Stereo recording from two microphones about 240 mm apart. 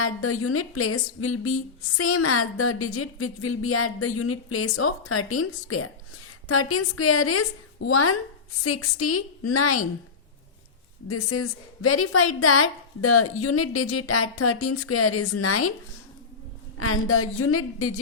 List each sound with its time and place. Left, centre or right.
0.0 s a woman's voice: left
11.1 s a woman's voice: left
16.7 s a woman's voice: left